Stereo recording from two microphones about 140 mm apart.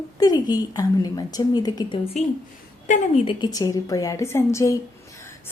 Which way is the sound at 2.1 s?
50° left (ahead or behind).